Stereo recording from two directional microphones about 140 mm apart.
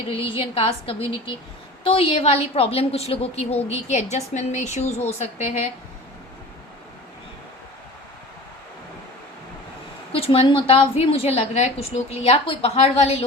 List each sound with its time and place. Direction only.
0.1 s a woman's voice: 40° left (ahead or behind); by 5.6 s 55° left (ahead or behind)
10.1 s a woman's voice: 45° left (ahead or behind)